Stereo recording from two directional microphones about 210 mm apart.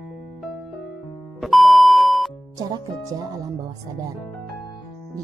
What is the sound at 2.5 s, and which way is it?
Speech, 15° right (ahead or behind).